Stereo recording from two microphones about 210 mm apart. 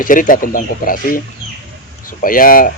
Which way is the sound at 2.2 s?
40° left (ahead or behind).